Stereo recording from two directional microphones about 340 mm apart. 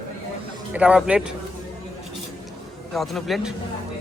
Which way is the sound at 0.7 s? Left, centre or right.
Centre.